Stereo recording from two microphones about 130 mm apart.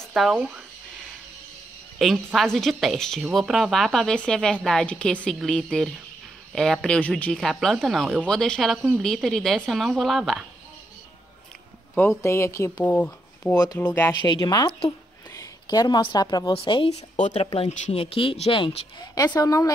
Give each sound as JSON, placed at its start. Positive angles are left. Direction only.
{"t": 0.1, "sound": "speech", "side_deg": -5}
{"t": 2.0, "sound": "a woman's voice", "side_deg": 0}
{"t": 12.2, "sound": "speech", "side_deg": 20}
{"t": 12.8, "sound": "speech", "side_deg": 10}
{"t": 14.2, "sound": "speech", "side_deg": 35}
{"t": 16.5, "sound": "speech", "side_deg": 45}
{"t": 16.9, "sound": "speech", "side_deg": 55}
{"t": 19.1, "sound": "speech", "side_deg": 30}